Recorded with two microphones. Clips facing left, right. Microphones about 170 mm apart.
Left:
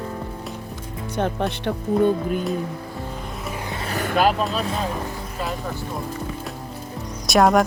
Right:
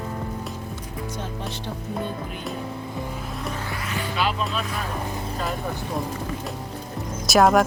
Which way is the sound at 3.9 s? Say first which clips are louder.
Left 7 dB; 45° left (ahead or behind).